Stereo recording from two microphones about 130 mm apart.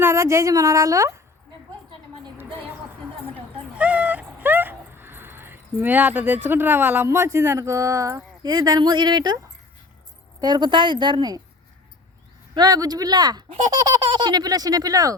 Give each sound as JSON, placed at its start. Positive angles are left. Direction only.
{"t": 0.0, "sound": "a woman's voice", "side_deg": -20}
{"t": 3.8, "sound": "a sound", "side_deg": -10}
{"t": 10.4, "sound": "speech", "side_deg": -35}
{"t": 12.5, "sound": "a woman's voice", "side_deg": -30}